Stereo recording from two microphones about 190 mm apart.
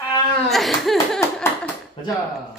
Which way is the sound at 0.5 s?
Centre (ahead or behind).